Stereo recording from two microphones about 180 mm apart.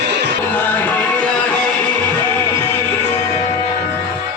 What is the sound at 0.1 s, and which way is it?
Music, 70° right (ahead or behind).